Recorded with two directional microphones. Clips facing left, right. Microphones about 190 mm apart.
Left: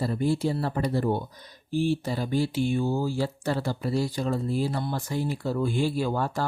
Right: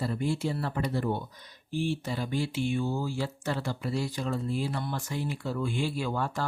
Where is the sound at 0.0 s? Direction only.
35° left (ahead or behind).